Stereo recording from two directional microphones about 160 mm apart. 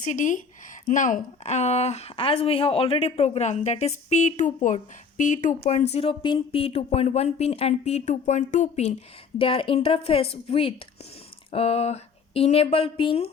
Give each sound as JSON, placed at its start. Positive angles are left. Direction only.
{"t": 0.0, "sound": "a woman's voice", "side_deg": 55}
{"t": 9.4, "sound": "speech", "side_deg": 35}